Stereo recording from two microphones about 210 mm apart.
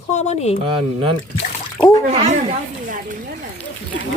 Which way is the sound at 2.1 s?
30° right (ahead or behind).